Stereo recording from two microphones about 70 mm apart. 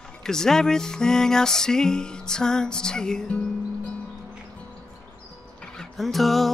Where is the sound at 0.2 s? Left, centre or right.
Centre.